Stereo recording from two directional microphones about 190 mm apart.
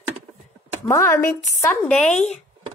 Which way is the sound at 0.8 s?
10° left (ahead or behind).